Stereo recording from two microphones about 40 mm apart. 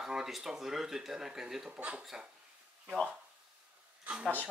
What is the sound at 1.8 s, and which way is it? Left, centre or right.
Speech, right.